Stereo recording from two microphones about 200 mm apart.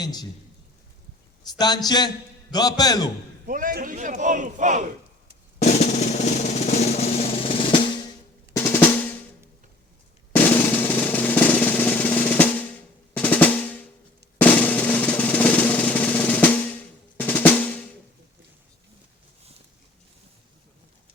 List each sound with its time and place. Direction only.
0.0 s a man's voice: 20° left (ahead or behind)
1.5 s a man's voice: 20° left (ahead or behind)
3.4 s a man's voice: 45° right (ahead or behind)
5.5 s drum roll: 35° left (ahead or behind)
8.5 s drum: 10° left (ahead or behind)
10.3 s drum roll: 10° left (ahead or behind)
13.1 s drum: 10° left (ahead or behind)